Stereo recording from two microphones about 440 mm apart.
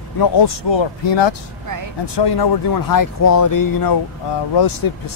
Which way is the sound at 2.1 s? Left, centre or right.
Left.